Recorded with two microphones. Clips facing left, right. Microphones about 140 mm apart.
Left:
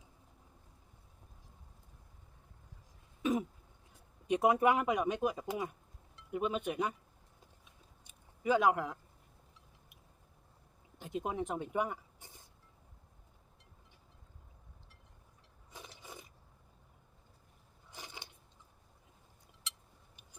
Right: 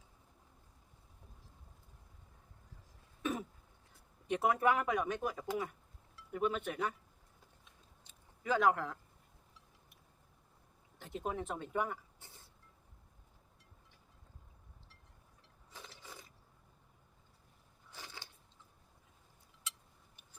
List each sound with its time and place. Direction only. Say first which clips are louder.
4.3 s speech: left 3 dB; 15° left (ahead or behind)
8.0 s a sound: left 5 dB; 15° left (ahead or behind)
11.0 s speech: left 3 dB; 15° left (ahead or behind)
15.7 s mechanisms: left 2 dB; 15° left (ahead or behind)
17.9 s biting: left 2 dB; 15° left (ahead or behind)